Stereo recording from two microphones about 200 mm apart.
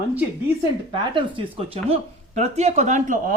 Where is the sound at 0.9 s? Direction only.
25° right (ahead or behind).